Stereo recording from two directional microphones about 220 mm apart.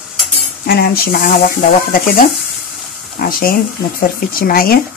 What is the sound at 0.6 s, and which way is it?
Speech, 45° left (ahead or behind).